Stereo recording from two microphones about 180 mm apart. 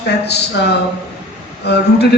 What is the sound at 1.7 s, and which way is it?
Speech, 65° left (ahead or behind).